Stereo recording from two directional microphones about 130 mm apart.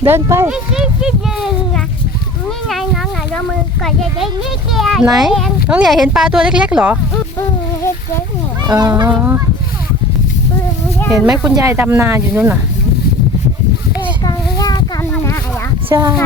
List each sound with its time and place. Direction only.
0.0 s speech: 20° right (ahead or behind)
0.5 s speech: 5° right (ahead or behind)
2.6 s a sound: centre (ahead or behind)
4.7 s speech: centre (ahead or behind)
8.6 s speech: 30° right (ahead or behind)
11.1 s speech: 5° right (ahead or behind)
11.5 s speech: 20° right (ahead or behind)
14.3 s a sound: 30° left (ahead or behind)
15.9 s speech: 25° right (ahead or behind)